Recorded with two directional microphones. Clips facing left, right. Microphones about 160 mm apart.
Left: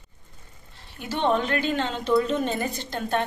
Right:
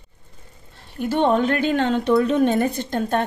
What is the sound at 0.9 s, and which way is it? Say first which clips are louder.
A woman's voice: right 5 dB; 50° right (ahead or behind).